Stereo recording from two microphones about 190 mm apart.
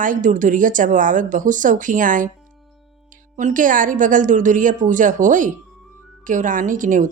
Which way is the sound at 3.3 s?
45° right (ahead or behind).